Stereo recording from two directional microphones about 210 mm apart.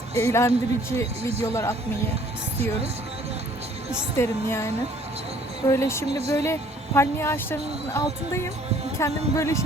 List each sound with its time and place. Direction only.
0.2 s speech: 15° left (ahead or behind)
1.2 s speech: 30° right (ahead or behind)
4.2 s speech: 15° left (ahead or behind)
6.1 s speech: 30° right (ahead or behind)
6.3 s speech: 10° left (ahead or behind)